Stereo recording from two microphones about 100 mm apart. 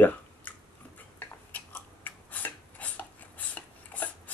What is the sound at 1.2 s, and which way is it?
Filing, 20° left (ahead or behind).